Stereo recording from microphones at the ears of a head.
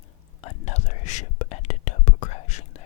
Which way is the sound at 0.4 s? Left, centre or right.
Left.